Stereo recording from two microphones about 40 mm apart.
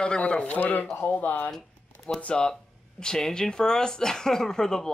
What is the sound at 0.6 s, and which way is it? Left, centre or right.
Speech, left.